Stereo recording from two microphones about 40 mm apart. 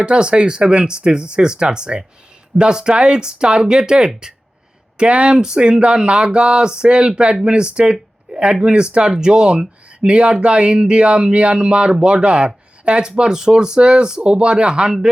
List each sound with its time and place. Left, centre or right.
0.0 s speech: right
8.3 s a sound: right
8.6 s speech: right